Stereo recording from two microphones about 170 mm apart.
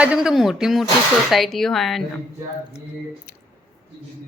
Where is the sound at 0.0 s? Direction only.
5° right (ahead or behind).